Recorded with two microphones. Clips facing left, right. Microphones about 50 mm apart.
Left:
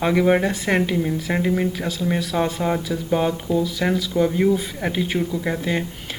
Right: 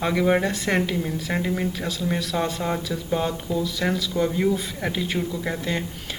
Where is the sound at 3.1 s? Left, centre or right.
Left.